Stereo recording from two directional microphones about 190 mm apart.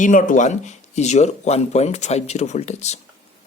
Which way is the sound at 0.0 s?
45° left (ahead or behind).